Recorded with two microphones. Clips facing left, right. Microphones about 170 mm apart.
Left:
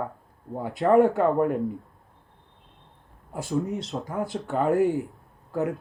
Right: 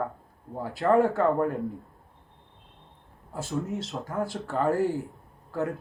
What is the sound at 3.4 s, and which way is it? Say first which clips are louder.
Speech: left 4 dB; centre (ahead or behind).